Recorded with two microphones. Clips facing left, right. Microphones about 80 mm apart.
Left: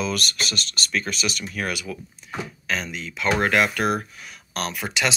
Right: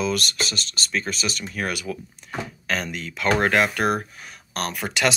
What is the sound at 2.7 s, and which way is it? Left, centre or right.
Speech, right.